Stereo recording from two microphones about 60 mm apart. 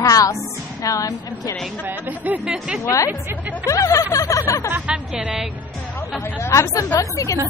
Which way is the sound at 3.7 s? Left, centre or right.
Left.